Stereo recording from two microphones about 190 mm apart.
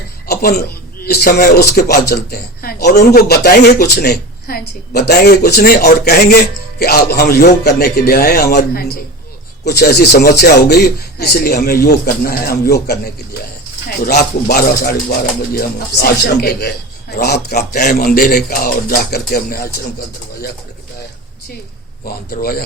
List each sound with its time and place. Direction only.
0.3 s a man's voice: 55° left (ahead or behind)
14.0 s a man's voice: 45° left (ahead or behind)
22.0 s speech: 50° left (ahead or behind)